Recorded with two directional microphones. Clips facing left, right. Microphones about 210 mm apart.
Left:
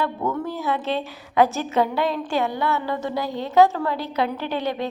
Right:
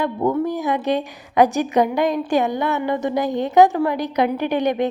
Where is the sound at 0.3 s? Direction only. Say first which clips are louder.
Right 5 dB; 15° right (ahead or behind).